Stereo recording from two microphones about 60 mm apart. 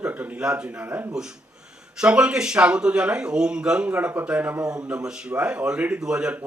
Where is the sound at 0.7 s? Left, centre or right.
Right.